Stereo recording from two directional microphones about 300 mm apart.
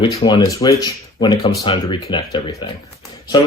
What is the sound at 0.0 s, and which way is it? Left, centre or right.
Speech, centre.